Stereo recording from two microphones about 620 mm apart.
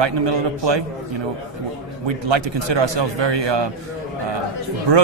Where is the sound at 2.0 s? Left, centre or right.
Right.